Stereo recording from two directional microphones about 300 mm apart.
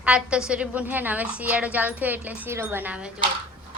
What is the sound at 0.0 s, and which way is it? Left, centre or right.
Speech, centre.